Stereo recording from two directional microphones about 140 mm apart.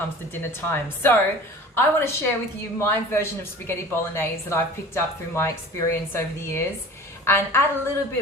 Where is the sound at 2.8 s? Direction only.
15° left (ahead or behind).